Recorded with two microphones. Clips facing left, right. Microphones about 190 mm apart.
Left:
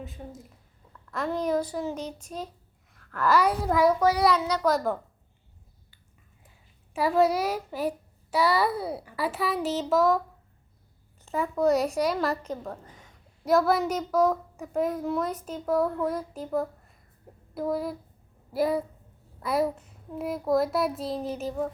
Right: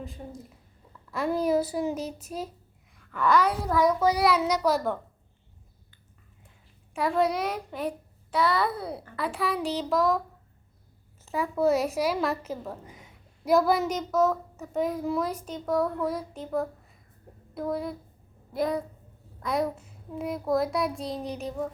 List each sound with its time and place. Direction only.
0.0 s a child's voice: centre (ahead or behind)
2.9 s a sound: centre (ahead or behind)
4.4 s a child's voice: 15° right (ahead or behind)
4.6 s a child's voice: centre (ahead or behind)
6.9 s a child's voice: 5° left (ahead or behind)
11.3 s a woman's voice: 5° right (ahead or behind); by 14.7 s 15° left (ahead or behind)
14.7 s a child's voice: centre (ahead or behind)